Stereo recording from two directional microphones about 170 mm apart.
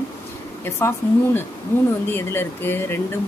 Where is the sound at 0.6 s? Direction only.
15° left (ahead or behind).